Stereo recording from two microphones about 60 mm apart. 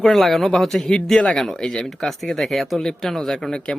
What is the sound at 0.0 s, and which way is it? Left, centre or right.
A man's voice, centre.